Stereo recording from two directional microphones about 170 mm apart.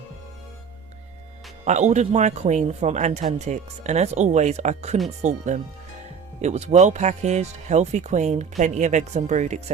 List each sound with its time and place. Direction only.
1.6 s speech: 45° right (ahead or behind)